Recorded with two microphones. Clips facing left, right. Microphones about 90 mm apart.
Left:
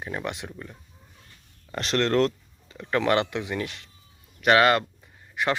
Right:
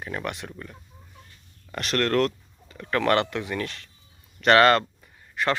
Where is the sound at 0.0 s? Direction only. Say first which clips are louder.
Even; 20° left (ahead or behind).